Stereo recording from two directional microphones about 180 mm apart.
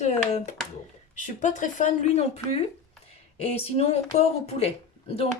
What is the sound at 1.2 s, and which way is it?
Speech, 45° left (ahead or behind).